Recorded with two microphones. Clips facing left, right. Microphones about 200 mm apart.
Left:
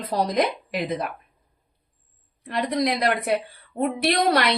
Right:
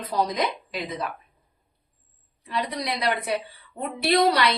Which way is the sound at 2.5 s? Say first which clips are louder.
Left 5 dB; 50° left (ahead or behind).